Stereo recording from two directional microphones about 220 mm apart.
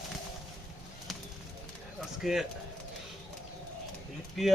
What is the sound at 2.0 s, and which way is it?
Speech, centre (ahead or behind).